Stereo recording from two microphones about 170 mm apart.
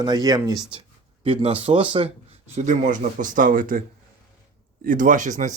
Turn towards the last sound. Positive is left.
turn(degrees=-50)  # may be behind; listen again after turning